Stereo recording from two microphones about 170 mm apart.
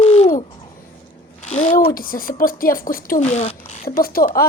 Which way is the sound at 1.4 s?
35° left (ahead or behind).